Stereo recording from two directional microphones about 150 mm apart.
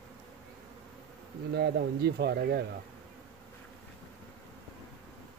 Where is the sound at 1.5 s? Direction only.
90° right.